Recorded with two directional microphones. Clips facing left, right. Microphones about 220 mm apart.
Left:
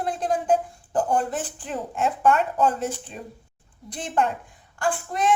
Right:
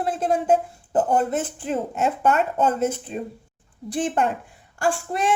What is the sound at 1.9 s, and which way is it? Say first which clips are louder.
Speech: left 2 dB; 5° right (ahead or behind).